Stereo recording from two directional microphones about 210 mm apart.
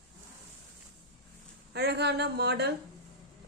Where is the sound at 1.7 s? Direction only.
50° right (ahead or behind).